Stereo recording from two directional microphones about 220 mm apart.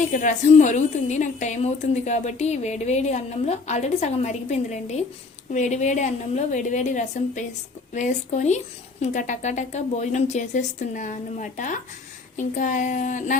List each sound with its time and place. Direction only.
0.1 s a woman's voice: 35° left (ahead or behind)